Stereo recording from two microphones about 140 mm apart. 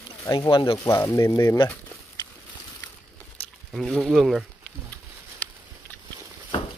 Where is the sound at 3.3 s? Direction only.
Centre (ahead or behind).